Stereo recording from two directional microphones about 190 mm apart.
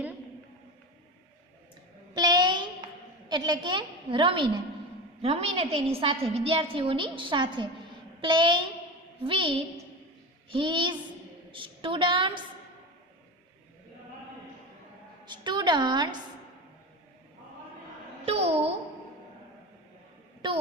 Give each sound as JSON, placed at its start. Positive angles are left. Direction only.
{"t": 2.1, "sound": "a sound", "side_deg": -20}
{"t": 5.2, "sound": "a woman's voice", "side_deg": -30}
{"t": 15.2, "sound": "a woman's voice", "side_deg": -25}
{"t": 18.3, "sound": "a woman's voice", "side_deg": -35}
{"t": 20.4, "sound": "a woman's voice", "side_deg": -25}